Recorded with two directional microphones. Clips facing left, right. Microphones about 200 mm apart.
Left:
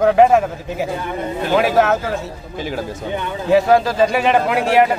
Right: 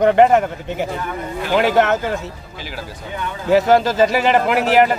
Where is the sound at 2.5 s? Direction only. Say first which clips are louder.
Left 11 dB; 50° left (ahead or behind).